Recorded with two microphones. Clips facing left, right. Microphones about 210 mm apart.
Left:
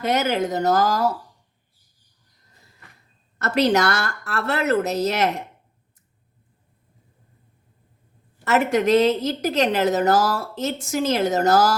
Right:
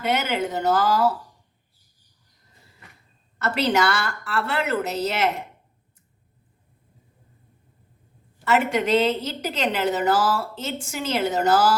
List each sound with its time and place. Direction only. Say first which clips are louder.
0.0 s speech: left 3 dB; 40° left (ahead or behind)
3.3 s a woman's voice: left 3 dB; 45° left (ahead or behind)
8.4 s a woman's voice: left 3 dB; 45° left (ahead or behind)